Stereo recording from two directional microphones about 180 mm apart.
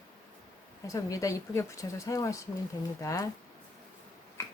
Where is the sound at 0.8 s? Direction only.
20° left (ahead or behind).